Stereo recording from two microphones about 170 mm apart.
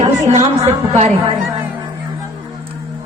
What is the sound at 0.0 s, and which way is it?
A woman's voice, 40° right (ahead or behind).